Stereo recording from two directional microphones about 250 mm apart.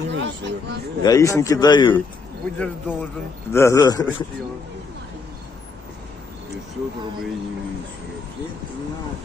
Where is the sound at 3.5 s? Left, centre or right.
Centre.